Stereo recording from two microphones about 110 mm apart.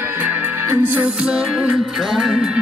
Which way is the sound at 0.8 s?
15° right (ahead or behind).